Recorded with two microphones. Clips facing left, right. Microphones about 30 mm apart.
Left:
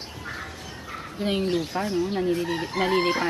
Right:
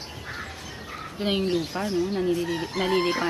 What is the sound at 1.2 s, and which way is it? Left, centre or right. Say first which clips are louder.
Speech: even; right.